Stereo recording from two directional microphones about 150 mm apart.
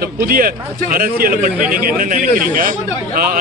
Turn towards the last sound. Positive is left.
turn(degrees=-65)  # may be behind; listen again after turning